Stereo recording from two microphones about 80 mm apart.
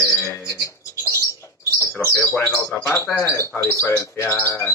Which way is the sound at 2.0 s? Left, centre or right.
Left.